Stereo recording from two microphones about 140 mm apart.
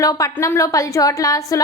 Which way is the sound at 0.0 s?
25° left (ahead or behind).